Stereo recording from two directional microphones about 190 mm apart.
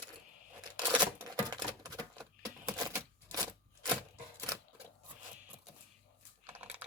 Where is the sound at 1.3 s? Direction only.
20° right (ahead or behind).